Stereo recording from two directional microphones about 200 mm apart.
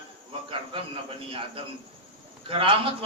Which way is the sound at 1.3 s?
25° right (ahead or behind).